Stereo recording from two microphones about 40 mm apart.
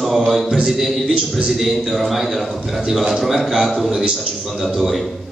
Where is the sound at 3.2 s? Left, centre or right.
Centre.